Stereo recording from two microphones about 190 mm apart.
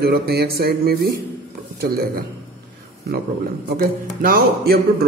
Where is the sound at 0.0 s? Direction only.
55° right (ahead or behind).